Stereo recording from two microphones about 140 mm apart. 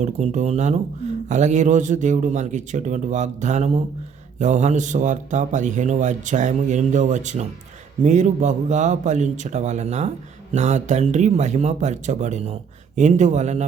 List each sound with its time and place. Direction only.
0.0 s speech: 55° right (ahead or behind)